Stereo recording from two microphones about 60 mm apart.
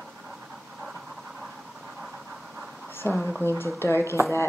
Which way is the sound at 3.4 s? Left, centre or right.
Left.